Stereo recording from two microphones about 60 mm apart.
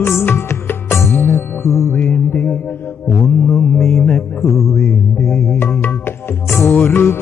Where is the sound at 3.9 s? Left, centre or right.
Centre.